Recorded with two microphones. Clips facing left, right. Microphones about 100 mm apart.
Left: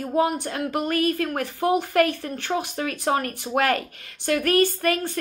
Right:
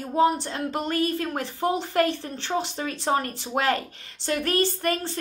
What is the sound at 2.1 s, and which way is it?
Speech, 50° left (ahead or behind).